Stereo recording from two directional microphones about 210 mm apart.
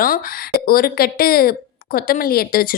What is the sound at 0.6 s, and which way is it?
A woman's voice, 45° left (ahead or behind).